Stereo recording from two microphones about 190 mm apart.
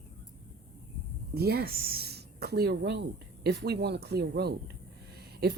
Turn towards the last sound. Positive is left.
turn(degrees=-55)  # may be behind; listen again after turning